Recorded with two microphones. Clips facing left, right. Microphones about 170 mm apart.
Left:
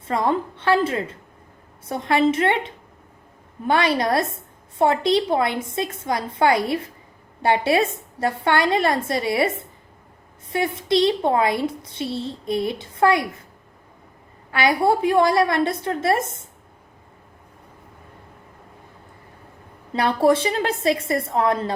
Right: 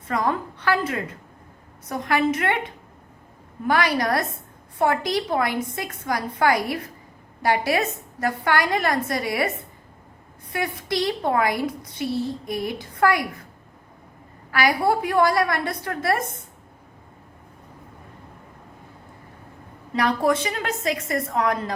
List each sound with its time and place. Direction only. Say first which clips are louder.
0.1 s a woman's voice: left 3 dB; 25° left (ahead or behind)
14.5 s a woman's voice: left 2 dB; 25° left (ahead or behind)
20.0 s a woman's voice: left 3 dB; 30° left (ahead or behind)